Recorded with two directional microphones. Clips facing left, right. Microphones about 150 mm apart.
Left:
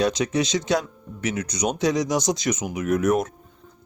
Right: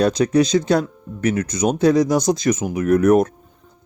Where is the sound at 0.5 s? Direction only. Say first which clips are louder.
Right 6 dB; 50° right (ahead or behind).